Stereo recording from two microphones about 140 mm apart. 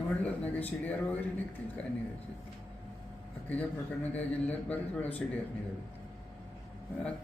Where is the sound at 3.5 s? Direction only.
10° left (ahead or behind).